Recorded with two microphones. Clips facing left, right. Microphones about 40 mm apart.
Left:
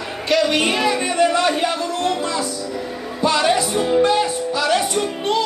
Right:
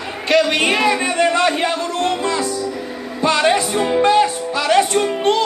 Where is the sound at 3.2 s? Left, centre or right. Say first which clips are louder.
Right 2 dB; right.